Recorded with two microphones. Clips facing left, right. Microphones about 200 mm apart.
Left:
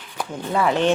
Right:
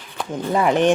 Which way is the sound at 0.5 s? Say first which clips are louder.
Right 2 dB; 15° right (ahead or behind).